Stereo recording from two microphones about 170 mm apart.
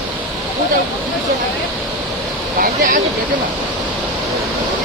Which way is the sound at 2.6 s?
60° right (ahead or behind).